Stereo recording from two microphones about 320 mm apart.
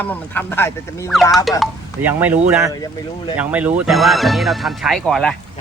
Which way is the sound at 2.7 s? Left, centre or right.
Centre.